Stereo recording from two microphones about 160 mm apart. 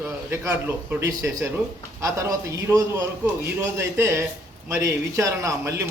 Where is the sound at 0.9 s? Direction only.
20° right (ahead or behind).